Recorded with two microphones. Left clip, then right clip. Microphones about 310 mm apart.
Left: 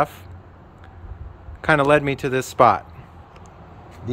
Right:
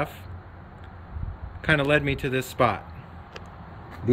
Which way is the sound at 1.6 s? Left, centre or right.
Centre.